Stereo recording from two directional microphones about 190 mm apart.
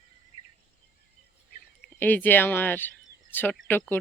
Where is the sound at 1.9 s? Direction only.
10° left (ahead or behind).